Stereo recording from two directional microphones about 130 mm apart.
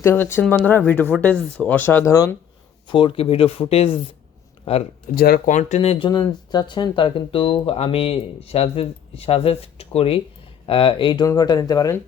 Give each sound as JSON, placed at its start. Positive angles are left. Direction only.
{"t": 0.0, "sound": "speech", "side_deg": 20}
{"t": 2.8, "sound": "speech", "side_deg": 40}
{"t": 5.1, "sound": "speech", "side_deg": 90}
{"t": 5.5, "sound": "speech", "side_deg": 65}
{"t": 6.1, "sound": "speech", "side_deg": 30}